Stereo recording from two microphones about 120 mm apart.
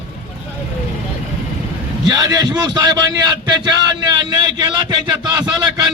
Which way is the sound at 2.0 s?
35° right (ahead or behind).